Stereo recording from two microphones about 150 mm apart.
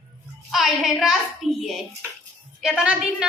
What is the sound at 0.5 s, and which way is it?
A child's voice, centre (ahead or behind).